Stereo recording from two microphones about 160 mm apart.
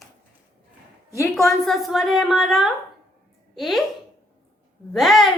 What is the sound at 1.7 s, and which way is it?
A woman's voice, centre (ahead or behind).